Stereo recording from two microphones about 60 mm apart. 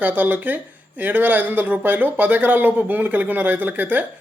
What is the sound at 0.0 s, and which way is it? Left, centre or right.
Speech, right.